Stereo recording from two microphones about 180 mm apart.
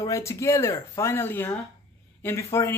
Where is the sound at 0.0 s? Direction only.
15° left (ahead or behind).